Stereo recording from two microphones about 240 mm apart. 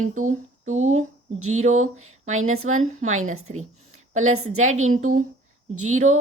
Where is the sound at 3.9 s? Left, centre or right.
Right.